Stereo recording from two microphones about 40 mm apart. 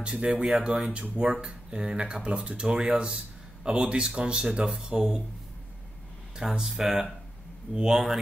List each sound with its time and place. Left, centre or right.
0.0 s speech: right
1.1 s speech: right
6.6 s speech: centre